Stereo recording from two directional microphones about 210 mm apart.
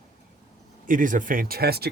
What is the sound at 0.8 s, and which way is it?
Speech, 40° right (ahead or behind).